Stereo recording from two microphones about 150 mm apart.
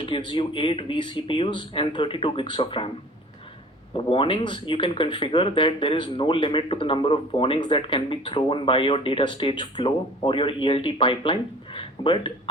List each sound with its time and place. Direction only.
0.0 s speech: 35° left (ahead or behind)
3.9 s speech: 35° left (ahead or behind)